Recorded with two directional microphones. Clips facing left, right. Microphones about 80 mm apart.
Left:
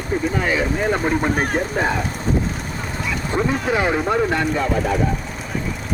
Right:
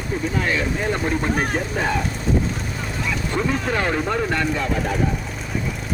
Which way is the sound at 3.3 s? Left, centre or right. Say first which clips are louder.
Left 3 dB; centre.